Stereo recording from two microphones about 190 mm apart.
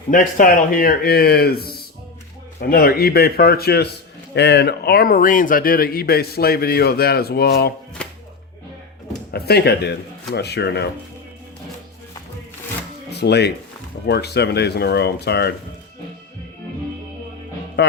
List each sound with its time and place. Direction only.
0.1 s speech: 45° left (ahead or behind)
8.0 s music: 5° left (ahead or behind)
9.3 s speech: 55° left (ahead or behind)
13.1 s a sound: 60° left (ahead or behind)
14.1 s speech: 60° left (ahead or behind)
17.8 s music: 60° left (ahead or behind)